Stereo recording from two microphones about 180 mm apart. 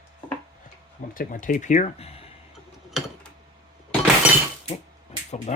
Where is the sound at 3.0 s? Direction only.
Centre (ahead or behind).